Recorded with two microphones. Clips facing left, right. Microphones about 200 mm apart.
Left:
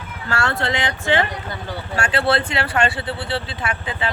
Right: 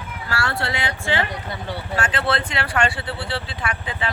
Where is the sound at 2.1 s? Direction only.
30° left (ahead or behind).